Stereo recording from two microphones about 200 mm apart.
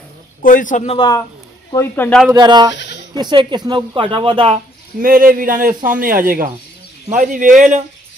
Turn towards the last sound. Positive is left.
turn(degrees=-40)  # may be behind; listen again after turning